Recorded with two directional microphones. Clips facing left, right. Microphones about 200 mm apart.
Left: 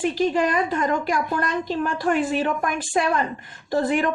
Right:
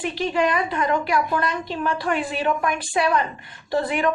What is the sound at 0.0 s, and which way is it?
A woman's voice, 45° left (ahead or behind).